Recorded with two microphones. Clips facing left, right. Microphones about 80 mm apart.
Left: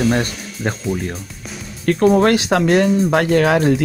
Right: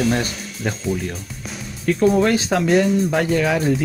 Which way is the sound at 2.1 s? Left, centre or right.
Left.